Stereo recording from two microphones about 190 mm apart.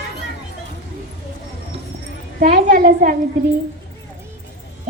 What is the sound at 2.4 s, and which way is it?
Speech, 45° right (ahead or behind).